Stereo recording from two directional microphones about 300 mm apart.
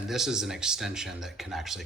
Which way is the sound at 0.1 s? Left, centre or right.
Centre.